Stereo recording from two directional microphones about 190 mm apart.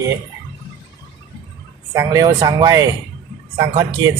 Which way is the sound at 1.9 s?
15° right (ahead or behind).